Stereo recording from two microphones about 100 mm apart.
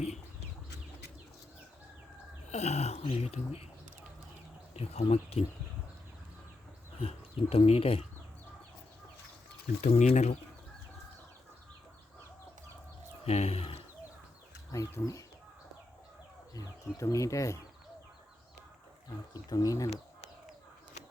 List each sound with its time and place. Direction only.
0.0 s bird: 90° left
2.6 s speech: 90° left
4.7 s speech: 90° left
7.0 s speech: 80° left
9.9 s speech: 90° left
13.2 s speech: 90° left
14.7 s speech: 35° left (ahead or behind)
16.6 s speech: 35° left (ahead or behind)
19.3 s speech: 40° left (ahead or behind)